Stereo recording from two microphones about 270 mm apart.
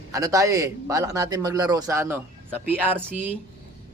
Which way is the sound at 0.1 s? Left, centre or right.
Centre.